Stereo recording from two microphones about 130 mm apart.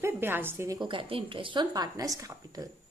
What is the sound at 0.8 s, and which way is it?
A woman's voice, 40° right (ahead or behind).